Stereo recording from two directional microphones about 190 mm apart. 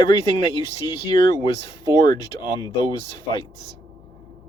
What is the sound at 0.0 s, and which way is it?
Speech, 20° left (ahead or behind).